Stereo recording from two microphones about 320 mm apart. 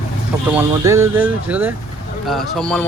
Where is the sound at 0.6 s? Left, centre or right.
Centre.